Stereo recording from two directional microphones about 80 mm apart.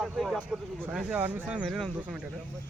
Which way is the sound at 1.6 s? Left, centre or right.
Centre.